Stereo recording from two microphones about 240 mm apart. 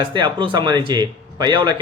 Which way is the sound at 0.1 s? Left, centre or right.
Centre.